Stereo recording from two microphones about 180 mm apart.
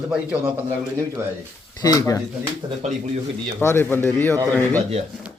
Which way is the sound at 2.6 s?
30° right (ahead or behind).